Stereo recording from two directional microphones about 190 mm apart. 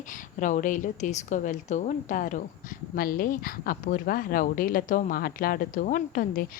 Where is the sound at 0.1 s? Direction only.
40° left (ahead or behind).